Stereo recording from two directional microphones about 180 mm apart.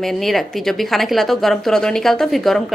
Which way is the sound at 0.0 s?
Centre (ahead or behind).